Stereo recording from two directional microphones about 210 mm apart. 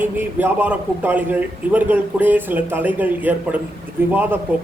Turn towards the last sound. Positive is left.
turn(degrees=-10)  # may be behind; listen again after turning